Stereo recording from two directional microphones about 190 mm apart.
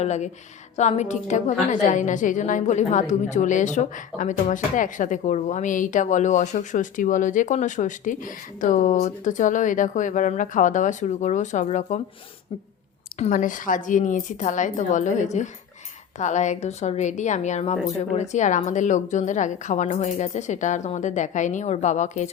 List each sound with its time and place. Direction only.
0.0 s a woman's voice: 35° left (ahead or behind)
13.1 s a woman's voice: 40° left (ahead or behind)